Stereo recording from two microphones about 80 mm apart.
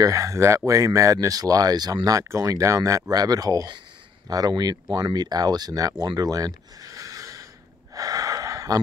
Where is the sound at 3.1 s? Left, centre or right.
Right.